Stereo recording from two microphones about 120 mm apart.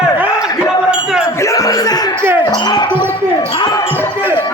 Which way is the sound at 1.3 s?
25° left (ahead or behind).